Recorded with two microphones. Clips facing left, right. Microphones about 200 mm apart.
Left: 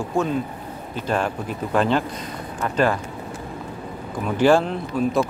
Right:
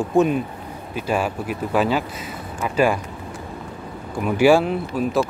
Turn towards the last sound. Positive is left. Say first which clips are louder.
# even
turn(degrees=-5)  # may be behind; listen again after turning